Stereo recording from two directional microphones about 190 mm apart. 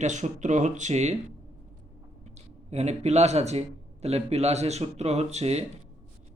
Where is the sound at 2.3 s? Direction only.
35° right (ahead or behind).